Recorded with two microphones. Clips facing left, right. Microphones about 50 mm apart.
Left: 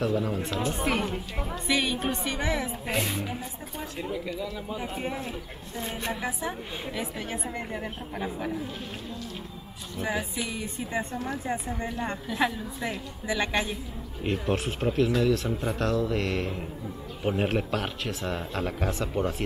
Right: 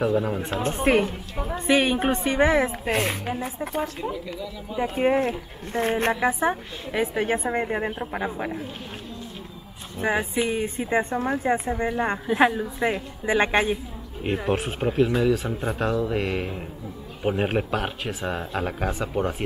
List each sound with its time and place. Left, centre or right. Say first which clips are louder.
0.0 s speech: right 4 dB; centre
0.5 s speech: right 9 dB; right
1.0 s a woman's voice: right 1 dB; centre
1.5 s speech: right 7 dB; right
2.9 s speech: right 1 dB; right
5.0 s speech: right 12 dB; right
6.2 s speech: right 9 dB; right
8.2 s speech: left 1 dB; right
9.9 s speech: right 7 dB; right; by 19.4 s centre